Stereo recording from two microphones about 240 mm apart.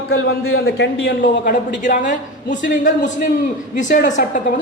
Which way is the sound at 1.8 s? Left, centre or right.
Left.